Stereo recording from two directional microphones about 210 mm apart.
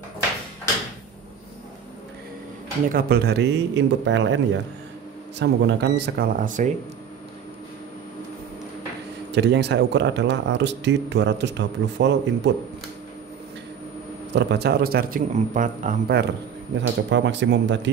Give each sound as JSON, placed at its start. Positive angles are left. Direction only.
{"t": 2.9, "sound": "speech", "side_deg": -50}
{"t": 5.4, "sound": "speech", "side_deg": -60}
{"t": 9.3, "sound": "speech", "side_deg": -55}
{"t": 14.3, "sound": "speech", "side_deg": -50}
{"t": 16.7, "sound": "speech", "side_deg": -60}